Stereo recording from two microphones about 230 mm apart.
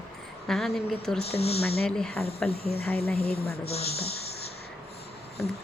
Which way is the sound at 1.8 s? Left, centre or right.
Centre.